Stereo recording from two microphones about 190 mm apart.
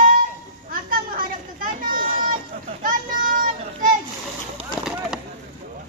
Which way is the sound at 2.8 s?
45° right (ahead or behind).